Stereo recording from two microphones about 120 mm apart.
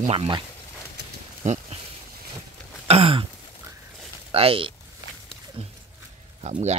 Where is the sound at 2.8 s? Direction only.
55° right (ahead or behind).